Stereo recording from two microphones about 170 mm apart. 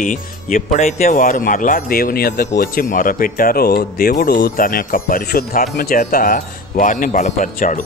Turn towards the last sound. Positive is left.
turn(degrees=50)  # may be behind; listen again after turning